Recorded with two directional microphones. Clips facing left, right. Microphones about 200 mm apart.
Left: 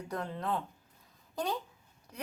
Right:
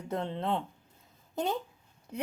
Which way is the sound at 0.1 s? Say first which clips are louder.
Right 4 dB; 25° right (ahead or behind).